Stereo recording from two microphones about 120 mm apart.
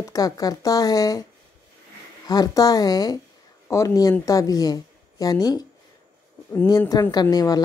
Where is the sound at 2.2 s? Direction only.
30° left (ahead or behind).